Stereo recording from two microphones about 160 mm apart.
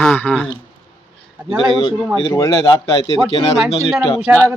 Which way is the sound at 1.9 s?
5° right (ahead or behind).